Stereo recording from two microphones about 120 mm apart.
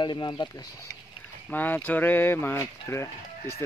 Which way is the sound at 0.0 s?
40° left (ahead or behind).